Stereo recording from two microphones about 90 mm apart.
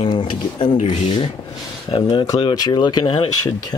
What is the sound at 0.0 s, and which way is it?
Speech, 70° left (ahead or behind).